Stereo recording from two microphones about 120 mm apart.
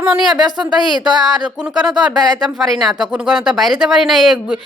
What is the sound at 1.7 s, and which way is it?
Speech, 5° right (ahead or behind).